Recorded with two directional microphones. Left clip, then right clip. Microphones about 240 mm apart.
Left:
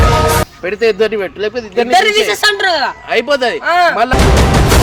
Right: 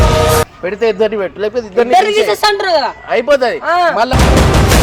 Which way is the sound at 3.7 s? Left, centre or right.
Left.